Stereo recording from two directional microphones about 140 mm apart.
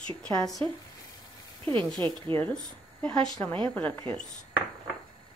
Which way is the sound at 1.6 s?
35° right (ahead or behind).